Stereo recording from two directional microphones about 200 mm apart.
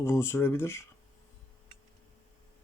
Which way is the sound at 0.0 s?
15° left (ahead or behind).